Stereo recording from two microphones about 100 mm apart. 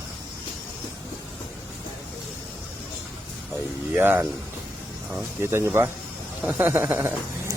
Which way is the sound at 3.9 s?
20° right (ahead or behind).